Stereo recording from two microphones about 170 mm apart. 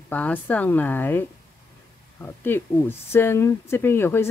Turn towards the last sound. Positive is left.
turn(degrees=15)  # may be behind; listen again after turning